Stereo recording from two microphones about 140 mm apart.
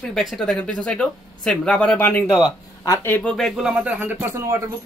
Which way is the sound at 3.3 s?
Centre (ahead or behind).